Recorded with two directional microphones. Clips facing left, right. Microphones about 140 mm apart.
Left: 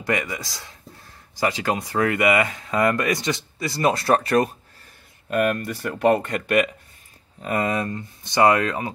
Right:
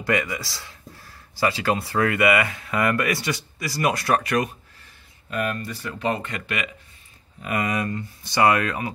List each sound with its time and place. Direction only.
0.0 s speech: 20° left (ahead or behind)
5.3 s speech: 55° left (ahead or behind)
7.4 s speech: 30° left (ahead or behind)